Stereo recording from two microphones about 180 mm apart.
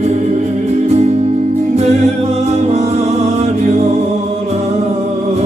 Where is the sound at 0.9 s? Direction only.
40° right (ahead or behind).